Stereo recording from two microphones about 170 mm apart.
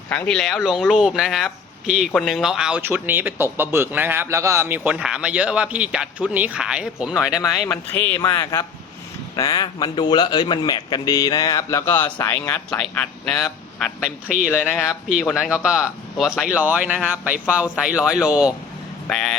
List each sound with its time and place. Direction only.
0.1 s speech: 5° left (ahead or behind)
7.3 s a man's voice: 20° left (ahead or behind); by 19.4 s 5° left (ahead or behind)